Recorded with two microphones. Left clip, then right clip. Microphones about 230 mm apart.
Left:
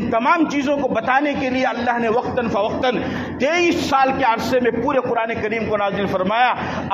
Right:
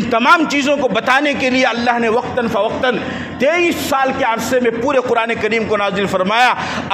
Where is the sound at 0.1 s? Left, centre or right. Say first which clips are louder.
Right 5 dB; right.